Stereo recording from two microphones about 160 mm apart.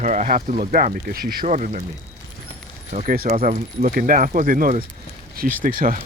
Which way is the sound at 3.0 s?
65° right (ahead or behind).